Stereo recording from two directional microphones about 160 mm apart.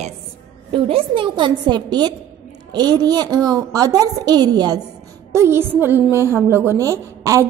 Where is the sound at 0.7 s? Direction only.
35° right (ahead or behind).